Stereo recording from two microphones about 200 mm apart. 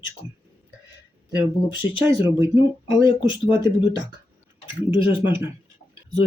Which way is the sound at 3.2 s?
25° left (ahead or behind).